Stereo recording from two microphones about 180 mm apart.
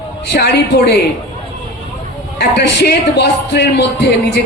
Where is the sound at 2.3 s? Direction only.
65° left (ahead or behind).